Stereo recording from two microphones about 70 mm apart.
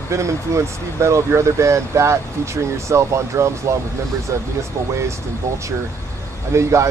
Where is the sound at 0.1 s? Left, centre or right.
Right.